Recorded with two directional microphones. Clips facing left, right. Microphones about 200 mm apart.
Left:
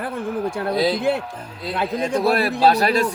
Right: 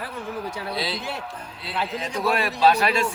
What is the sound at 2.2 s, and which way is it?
Speech, 35° left (ahead or behind).